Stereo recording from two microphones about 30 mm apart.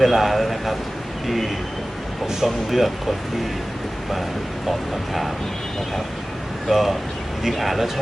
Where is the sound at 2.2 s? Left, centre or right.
Centre.